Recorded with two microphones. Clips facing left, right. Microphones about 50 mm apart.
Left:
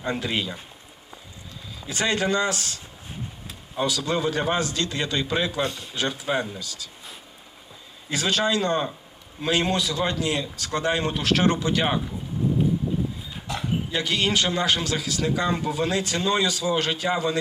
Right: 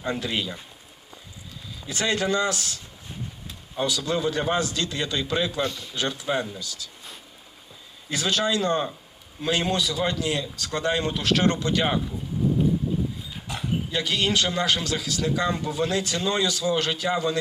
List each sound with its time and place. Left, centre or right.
0.0 s speech: centre
1.8 s speech: centre
3.8 s speech: centre
5.6 s a man's voice: left
5.9 s speech: centre
8.1 s speech: centre
13.6 s a man's voice: centre